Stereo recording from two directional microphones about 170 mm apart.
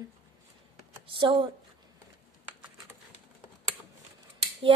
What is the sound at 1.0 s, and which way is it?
Speech, 30° right (ahead or behind).